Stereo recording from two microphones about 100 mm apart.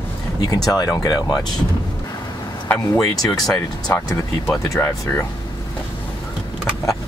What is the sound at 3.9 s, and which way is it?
Speech, 25° left (ahead or behind).